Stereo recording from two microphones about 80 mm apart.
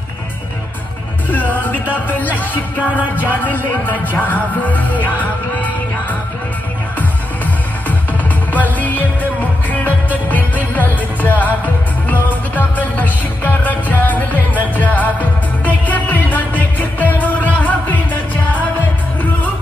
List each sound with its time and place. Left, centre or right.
1.3 s music: left
8.5 s music: centre